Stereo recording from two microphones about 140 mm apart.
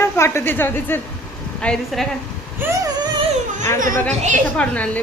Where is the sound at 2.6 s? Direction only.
25° right (ahead or behind).